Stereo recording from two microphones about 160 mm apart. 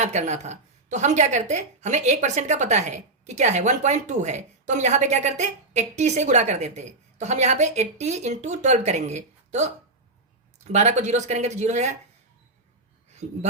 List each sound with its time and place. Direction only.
0.0 s a woman's voice: 45° right (ahead or behind)
13.2 s a woman's voice: 50° right (ahead or behind)